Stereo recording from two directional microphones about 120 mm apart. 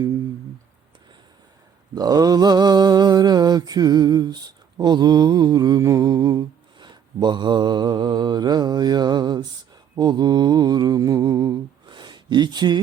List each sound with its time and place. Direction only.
2.0 s mantra: 35° right (ahead or behind)